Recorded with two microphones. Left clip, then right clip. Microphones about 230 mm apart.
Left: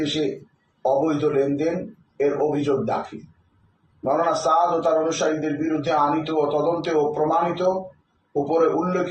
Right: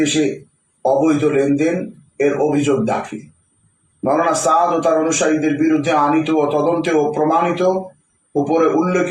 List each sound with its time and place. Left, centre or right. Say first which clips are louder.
0.0 s a man's voice: right 7 dB; right